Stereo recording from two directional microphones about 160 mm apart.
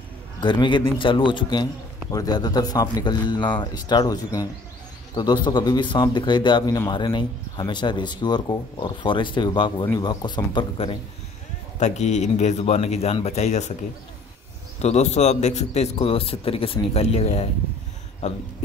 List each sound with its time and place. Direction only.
0.4 s speech: 30° left (ahead or behind)
11.8 s speech: 45° left (ahead or behind)
14.8 s a man's voice: 45° left (ahead or behind)